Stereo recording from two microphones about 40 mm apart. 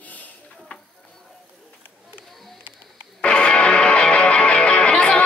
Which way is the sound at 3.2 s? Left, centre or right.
Left.